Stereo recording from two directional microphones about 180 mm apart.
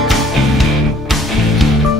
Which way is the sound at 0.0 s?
Centre (ahead or behind).